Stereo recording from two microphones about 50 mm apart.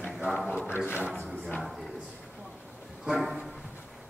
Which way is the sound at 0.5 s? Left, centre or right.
Right.